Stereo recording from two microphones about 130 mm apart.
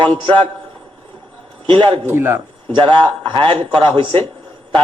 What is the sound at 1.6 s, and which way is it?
Speech, 40° right (ahead or behind).